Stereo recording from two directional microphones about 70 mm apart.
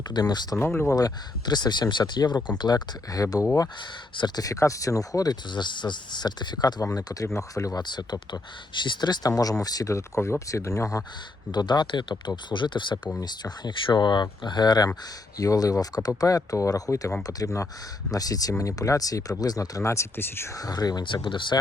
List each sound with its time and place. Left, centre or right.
0.1 s speech: left
0.6 s speech: left
0.9 s speech: left
6.9 s speech: left
7.3 s speech: left
7.7 s speech: left
9.4 s speech: left
9.9 s speech: left
11.5 s speech: left
15.4 s speech: left
18.1 s speech: left
18.5 s speech: left
20.5 s speech: left